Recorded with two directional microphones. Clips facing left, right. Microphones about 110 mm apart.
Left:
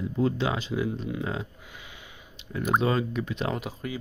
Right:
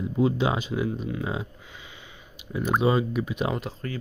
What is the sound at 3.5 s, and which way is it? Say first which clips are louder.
Speech: right 1 dB; 10° left (ahead or behind).